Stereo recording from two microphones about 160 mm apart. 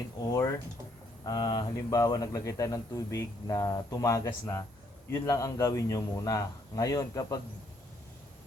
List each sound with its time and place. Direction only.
0.3 s a man's voice: 20° left (ahead or behind)